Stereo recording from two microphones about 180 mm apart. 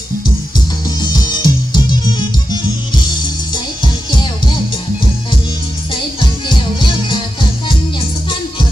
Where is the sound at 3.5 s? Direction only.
25° left (ahead or behind).